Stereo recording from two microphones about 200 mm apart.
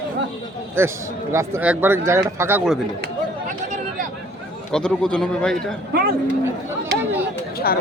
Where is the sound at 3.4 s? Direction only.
40° right (ahead or behind).